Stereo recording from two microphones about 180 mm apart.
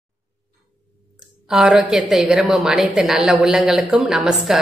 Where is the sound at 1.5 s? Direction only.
Centre (ahead or behind).